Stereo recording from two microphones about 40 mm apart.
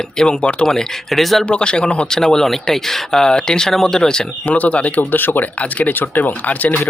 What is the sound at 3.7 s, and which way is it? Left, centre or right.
Speech, centre.